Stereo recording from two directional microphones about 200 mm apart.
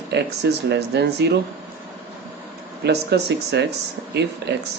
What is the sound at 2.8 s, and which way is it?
Speech, 55° right (ahead or behind).